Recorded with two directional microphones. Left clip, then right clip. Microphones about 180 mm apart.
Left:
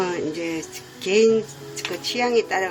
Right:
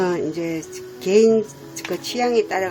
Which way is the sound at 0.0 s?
40° right (ahead or behind).